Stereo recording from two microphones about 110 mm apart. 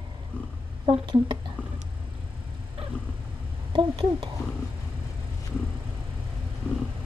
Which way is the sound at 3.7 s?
50° right (ahead or behind).